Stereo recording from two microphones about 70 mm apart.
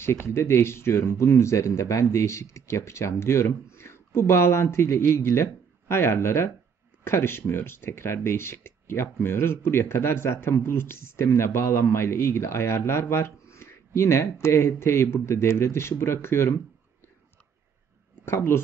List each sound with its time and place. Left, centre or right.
0.0 s speech: left
18.2 s speech: left